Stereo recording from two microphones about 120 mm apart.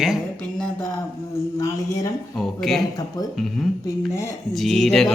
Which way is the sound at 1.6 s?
30° left (ahead or behind).